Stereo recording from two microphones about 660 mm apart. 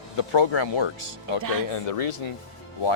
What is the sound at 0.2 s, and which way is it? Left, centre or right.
Speech, left.